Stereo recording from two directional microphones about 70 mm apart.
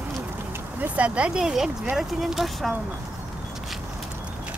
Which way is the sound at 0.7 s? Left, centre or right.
Right.